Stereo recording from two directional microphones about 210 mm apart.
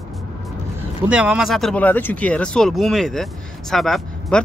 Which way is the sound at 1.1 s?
5° right (ahead or behind).